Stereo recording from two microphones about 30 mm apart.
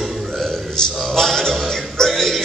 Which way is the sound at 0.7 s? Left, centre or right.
Centre.